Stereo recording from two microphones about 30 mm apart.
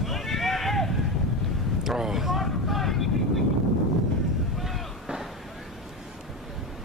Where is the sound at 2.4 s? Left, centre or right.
Centre.